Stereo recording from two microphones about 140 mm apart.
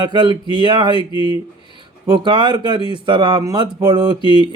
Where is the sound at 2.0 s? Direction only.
30° right (ahead or behind).